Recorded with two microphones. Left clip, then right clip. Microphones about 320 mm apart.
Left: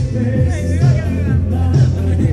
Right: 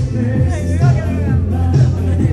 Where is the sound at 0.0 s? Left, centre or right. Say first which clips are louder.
Even; centre.